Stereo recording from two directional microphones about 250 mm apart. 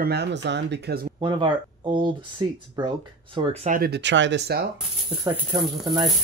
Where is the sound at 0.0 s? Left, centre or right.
Right.